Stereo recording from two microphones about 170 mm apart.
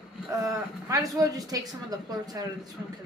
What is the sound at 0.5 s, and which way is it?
Speech, 20° right (ahead or behind).